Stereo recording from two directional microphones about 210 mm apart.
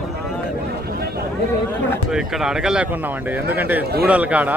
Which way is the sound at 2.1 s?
5° right (ahead or behind).